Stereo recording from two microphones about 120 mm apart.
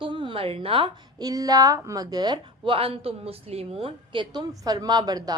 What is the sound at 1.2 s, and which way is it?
A woman's voice, 30° right (ahead or behind).